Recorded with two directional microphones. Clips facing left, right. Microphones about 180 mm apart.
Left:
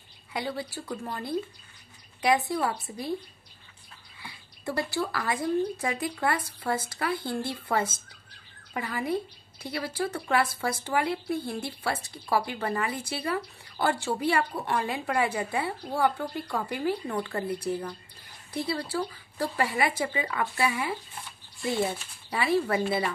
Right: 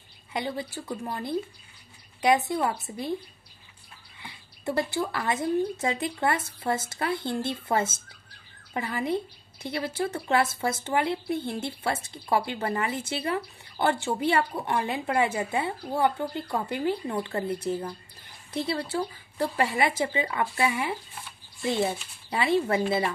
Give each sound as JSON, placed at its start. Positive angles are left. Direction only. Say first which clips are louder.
{"t": 0.3, "sound": "speech", "louder": "right 1 dB", "side_deg": -20}
{"t": 4.2, "sound": "speech", "louder": "right 2 dB", "side_deg": -20}
{"t": 22.3, "sound": "speech", "louder": "right 1 dB", "side_deg": -25}